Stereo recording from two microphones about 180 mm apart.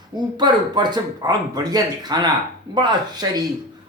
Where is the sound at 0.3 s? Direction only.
25° right (ahead or behind).